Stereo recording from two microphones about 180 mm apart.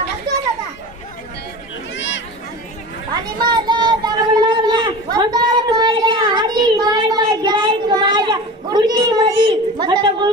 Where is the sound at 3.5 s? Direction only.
25° right (ahead or behind).